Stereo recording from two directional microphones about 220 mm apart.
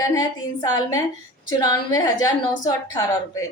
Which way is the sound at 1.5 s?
20° left (ahead or behind).